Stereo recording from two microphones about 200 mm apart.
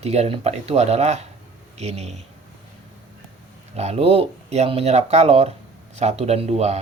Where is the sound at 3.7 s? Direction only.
30° right (ahead or behind).